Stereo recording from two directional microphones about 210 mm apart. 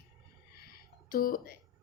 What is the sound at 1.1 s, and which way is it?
Speech, 45° left (ahead or behind).